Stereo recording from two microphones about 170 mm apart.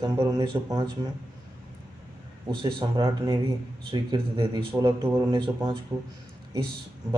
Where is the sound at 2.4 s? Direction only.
30° right (ahead or behind).